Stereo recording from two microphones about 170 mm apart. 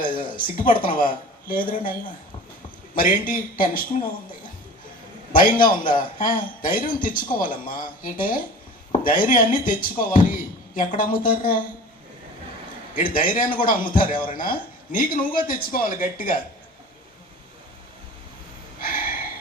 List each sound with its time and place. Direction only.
0.0 s speech: 55° left (ahead or behind)
2.9 s speech: 55° left (ahead or behind)
5.3 s a man's voice: 55° left (ahead or behind)
13.0 s speech: 55° left (ahead or behind)
18.8 s gasp: 55° left (ahead or behind)